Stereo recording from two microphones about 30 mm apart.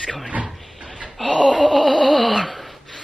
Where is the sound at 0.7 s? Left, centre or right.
Centre.